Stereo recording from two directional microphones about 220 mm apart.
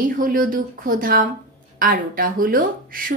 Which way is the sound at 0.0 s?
40° right (ahead or behind).